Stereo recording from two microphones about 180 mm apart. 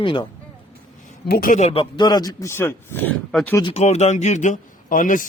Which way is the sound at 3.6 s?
30° left (ahead or behind).